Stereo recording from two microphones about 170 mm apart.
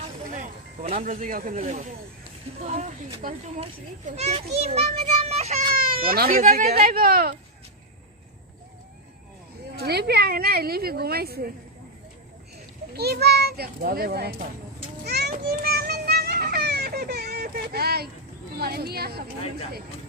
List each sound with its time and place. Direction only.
0.3 s a sound: 40° right (ahead or behind)
1.1 s a child's voice: 55° right (ahead or behind)
5.7 s baby cry: 60° right (ahead or behind)
6.5 s a woman's voice: 60° right (ahead or behind)
9.8 s a woman's voice: 70° right (ahead or behind)
12.9 s a child's voice: 70° right (ahead or behind)
15.0 s children playing: 75° right (ahead or behind)
15.4 s music: 70° right (ahead or behind)
18.6 s a child's voice: 65° right (ahead or behind)